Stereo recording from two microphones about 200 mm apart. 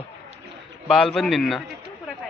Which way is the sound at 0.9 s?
Centre (ahead or behind).